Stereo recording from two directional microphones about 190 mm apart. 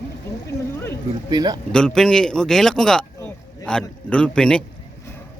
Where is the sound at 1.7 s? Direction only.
5° left (ahead or behind).